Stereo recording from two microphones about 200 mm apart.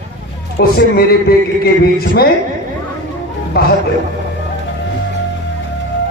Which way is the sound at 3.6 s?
50° left (ahead or behind).